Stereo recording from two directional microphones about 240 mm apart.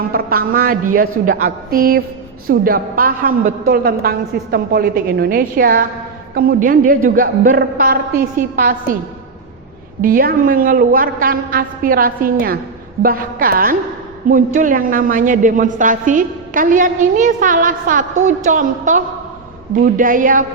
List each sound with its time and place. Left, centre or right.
0.1 s a woman's voice: right
10.0 s a woman's voice: right